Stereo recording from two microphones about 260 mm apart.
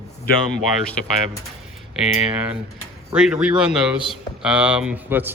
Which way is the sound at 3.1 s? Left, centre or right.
Centre.